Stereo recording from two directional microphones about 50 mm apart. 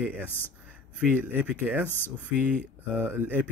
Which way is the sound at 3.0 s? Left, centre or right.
Right.